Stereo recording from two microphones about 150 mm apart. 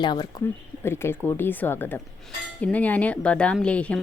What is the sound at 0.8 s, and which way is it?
Speech, 15° left (ahead or behind).